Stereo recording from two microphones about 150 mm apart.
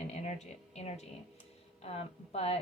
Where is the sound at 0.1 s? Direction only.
50° left (ahead or behind).